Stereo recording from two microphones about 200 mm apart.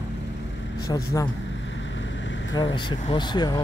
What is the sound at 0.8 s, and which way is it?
Speech, 15° left (ahead or behind).